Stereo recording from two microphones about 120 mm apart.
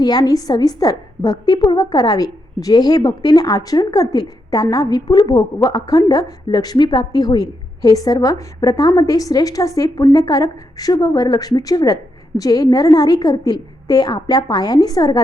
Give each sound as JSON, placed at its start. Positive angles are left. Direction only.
{"t": 0.0, "sound": "a woman's voice", "side_deg": 35}